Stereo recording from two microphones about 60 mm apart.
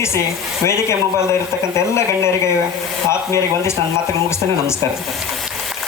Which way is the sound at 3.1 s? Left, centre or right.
Left.